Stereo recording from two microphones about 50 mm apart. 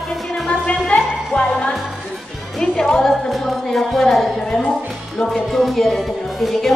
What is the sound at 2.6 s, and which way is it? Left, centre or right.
A man's voice, centre.